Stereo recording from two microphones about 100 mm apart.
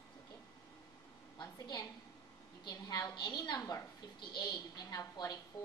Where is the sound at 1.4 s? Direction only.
40° left (ahead or behind).